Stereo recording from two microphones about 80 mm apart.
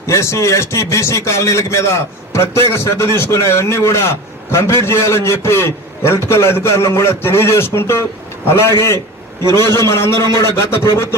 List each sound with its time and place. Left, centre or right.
0.1 s a man's voice: left
9.4 s a man's voice: right
9.6 s a man's voice: left